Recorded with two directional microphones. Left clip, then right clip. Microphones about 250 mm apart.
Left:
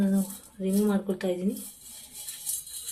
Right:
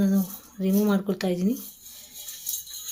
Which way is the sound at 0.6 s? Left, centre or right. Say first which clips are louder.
Right 3 dB; right.